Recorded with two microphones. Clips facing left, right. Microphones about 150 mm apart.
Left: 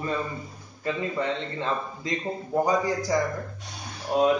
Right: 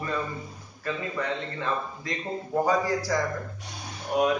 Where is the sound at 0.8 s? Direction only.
25° left (ahead or behind).